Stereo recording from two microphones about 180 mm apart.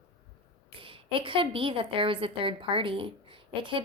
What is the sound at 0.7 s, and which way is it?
A woman's voice, 30° right (ahead or behind).